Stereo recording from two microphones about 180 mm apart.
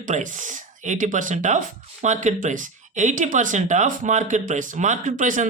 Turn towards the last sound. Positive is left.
turn(degrees=-45)  # may be behind; listen again after turning